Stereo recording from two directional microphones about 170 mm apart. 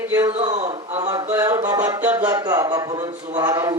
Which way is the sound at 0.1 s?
15° right (ahead or behind).